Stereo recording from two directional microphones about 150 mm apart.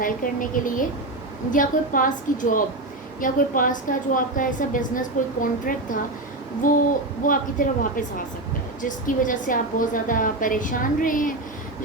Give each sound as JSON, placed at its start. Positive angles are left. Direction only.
{"t": 0.0, "sound": "a woman's voice", "side_deg": 65}